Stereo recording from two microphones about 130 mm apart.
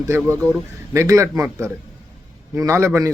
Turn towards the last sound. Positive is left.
turn(degrees=-25)  # may be behind; listen again after turning